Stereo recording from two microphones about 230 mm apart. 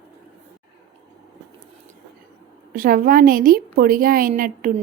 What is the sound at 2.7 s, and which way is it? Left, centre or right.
A woman's voice, right.